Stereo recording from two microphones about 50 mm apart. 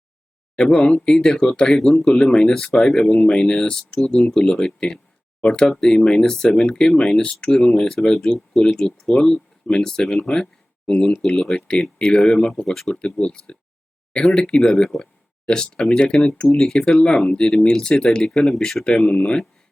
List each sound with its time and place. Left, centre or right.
0.5 s speech: centre
2.2 s speech: left
10.4 s a sound: left
11.3 s speech: centre
12.9 s speech: centre
16.6 s speech: centre
17.0 s speech: centre